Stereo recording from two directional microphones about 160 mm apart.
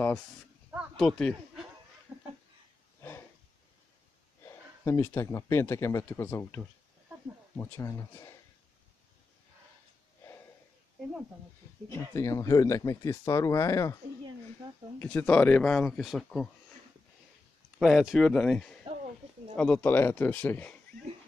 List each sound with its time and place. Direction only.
0.9 s speech: 5° left (ahead or behind)
2.1 s a sound: 5° right (ahead or behind)
3.0 s a sound: 15° left (ahead or behind)
4.5 s speech: 20° left (ahead or behind)
11.9 s speech: 20° left (ahead or behind)
15.0 s speech: 10° left (ahead or behind)
17.7 s speech: 5° right (ahead or behind)